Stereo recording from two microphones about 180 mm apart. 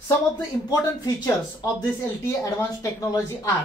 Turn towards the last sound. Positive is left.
turn(degrees=20)  # may be behind; listen again after turning